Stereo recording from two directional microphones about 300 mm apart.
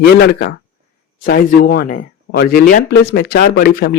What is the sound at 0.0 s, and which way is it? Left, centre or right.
Speech, left.